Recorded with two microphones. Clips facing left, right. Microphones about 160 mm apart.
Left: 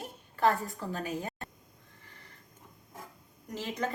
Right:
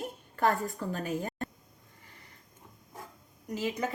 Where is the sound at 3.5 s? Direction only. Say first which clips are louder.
Right 2 dB; 10° right (ahead or behind).